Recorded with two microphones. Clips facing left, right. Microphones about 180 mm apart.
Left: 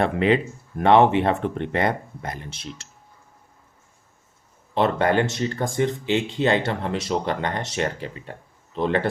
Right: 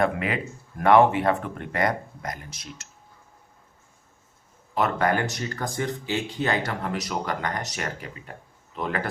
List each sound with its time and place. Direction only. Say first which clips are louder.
0.0 s speech: left 5 dB; 25° left (ahead or behind)
4.7 s speech: left 3 dB; 25° left (ahead or behind)